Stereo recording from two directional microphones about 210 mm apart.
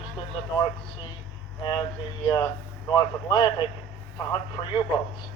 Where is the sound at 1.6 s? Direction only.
20° left (ahead or behind).